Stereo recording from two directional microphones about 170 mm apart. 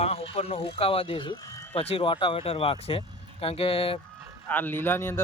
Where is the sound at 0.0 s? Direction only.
35° left (ahead or behind).